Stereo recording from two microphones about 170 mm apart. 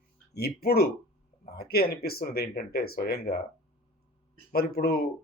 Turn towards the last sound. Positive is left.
turn(degrees=60)  # may be behind; listen again after turning